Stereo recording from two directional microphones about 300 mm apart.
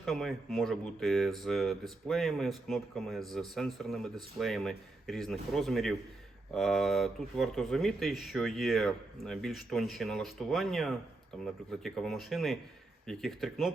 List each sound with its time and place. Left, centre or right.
0.0 s speech: centre